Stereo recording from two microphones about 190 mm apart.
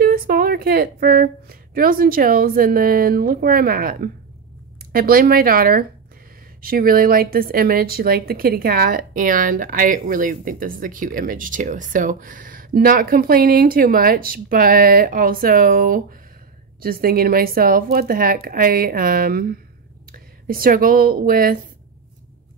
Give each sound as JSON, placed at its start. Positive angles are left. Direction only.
{"t": 0.0, "sound": "a woman's voice", "side_deg": -50}